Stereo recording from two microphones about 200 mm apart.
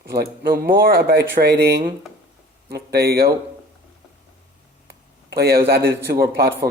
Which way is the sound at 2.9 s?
50° right (ahead or behind).